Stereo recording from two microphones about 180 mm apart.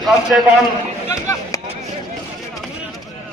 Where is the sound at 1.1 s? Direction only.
20° left (ahead or behind).